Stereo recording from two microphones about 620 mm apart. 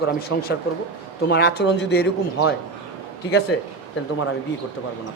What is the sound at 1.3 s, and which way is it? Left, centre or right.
Speech, centre.